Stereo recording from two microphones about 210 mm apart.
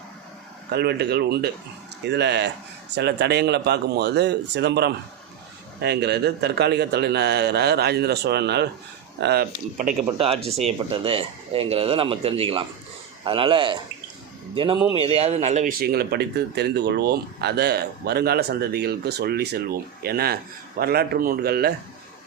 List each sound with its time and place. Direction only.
0.7 s speech: 50° right (ahead or behind)
10.2 s speech: 25° right (ahead or behind); by 21.7 s 50° right (ahead or behind)